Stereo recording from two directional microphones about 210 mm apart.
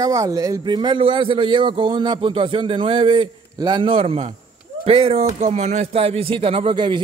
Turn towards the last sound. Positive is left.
turn(degrees=-20)  # may be behind; listen again after turning